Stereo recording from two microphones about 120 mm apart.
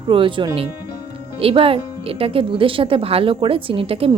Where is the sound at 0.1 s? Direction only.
45° right (ahead or behind).